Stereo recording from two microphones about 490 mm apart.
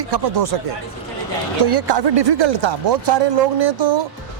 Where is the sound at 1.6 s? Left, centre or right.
Right.